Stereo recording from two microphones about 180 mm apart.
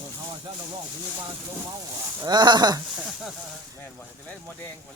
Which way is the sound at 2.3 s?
25° right (ahead or behind).